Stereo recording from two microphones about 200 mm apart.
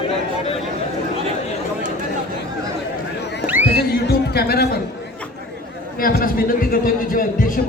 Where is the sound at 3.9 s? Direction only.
50° left (ahead or behind).